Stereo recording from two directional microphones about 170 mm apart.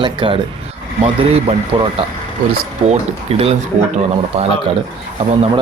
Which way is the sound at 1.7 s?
30° right (ahead or behind).